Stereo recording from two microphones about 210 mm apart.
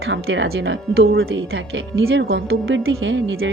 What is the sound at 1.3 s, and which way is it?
Speech, 65° right (ahead or behind).